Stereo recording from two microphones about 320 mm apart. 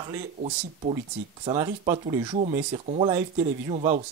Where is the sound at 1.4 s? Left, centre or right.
Centre.